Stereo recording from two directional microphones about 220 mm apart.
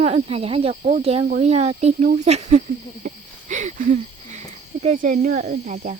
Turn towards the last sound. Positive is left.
turn(degrees=-35)  # may be behind; listen again after turning